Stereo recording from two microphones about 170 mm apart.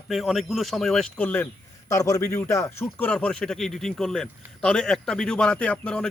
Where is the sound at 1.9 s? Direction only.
20° left (ahead or behind).